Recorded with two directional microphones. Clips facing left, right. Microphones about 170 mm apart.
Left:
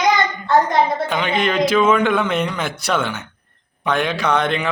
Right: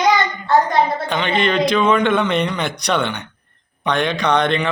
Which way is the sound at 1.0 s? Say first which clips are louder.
Right 1 dB; 5° left (ahead or behind).